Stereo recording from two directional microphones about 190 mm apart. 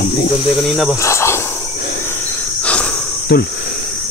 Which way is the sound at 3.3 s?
55° left (ahead or behind).